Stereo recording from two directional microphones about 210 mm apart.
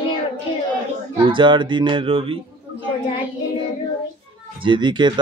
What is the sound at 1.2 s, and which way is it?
Speech, 20° right (ahead or behind).